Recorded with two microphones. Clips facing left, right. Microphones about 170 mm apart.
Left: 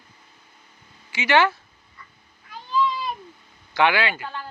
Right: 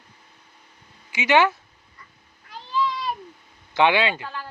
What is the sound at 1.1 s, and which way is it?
Speech, 15° right (ahead or behind).